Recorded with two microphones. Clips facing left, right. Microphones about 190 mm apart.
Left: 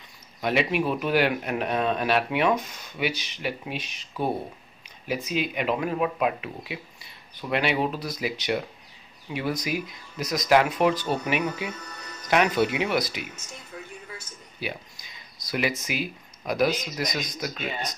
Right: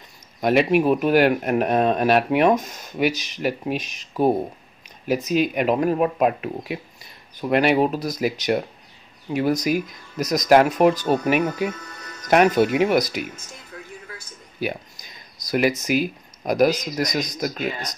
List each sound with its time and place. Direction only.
0.4 s speech: 45° right (ahead or behind)
14.6 s speech: 45° right (ahead or behind)